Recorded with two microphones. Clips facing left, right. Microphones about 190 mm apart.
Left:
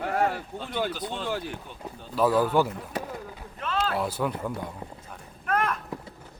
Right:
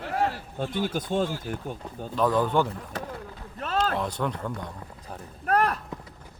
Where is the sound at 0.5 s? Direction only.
50° right (ahead or behind).